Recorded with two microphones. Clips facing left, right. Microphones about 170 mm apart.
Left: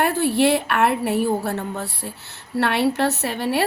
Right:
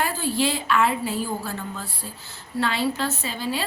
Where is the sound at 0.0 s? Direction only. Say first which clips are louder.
Left 6 dB; 65° left (ahead or behind).